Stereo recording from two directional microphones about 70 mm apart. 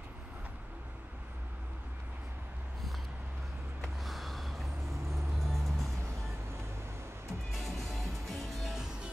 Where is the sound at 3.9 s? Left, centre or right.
Centre.